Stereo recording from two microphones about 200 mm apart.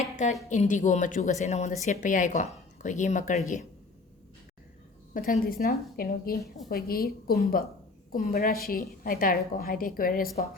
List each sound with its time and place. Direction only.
0.2 s a woman's voice: 35° left (ahead or behind)
5.1 s a woman's voice: 45° left (ahead or behind)